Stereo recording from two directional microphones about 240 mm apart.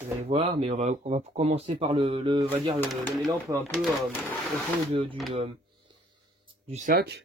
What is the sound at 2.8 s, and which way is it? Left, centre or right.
Speech, centre.